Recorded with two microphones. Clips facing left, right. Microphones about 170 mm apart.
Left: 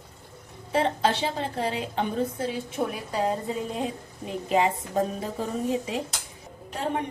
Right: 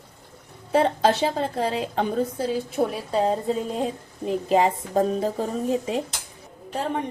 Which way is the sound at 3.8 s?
35° right (ahead or behind).